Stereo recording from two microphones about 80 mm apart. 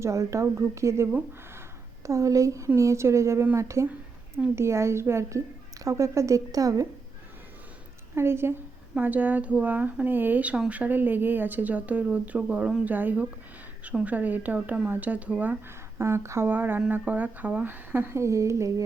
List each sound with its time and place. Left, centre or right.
0.0 s speech: right
2.0 s speech: right
8.1 s speech: right
9.0 s speech: right
16.0 s speech: right